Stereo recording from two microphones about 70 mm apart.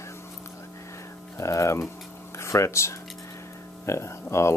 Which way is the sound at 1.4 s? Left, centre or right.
Left.